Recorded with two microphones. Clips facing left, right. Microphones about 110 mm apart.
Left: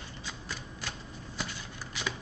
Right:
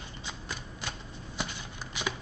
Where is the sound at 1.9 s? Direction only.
20° right (ahead or behind).